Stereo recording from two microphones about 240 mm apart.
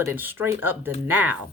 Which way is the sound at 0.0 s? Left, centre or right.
Centre.